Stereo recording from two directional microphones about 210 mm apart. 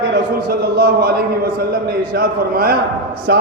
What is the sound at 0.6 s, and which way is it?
Speech, 50° right (ahead or behind).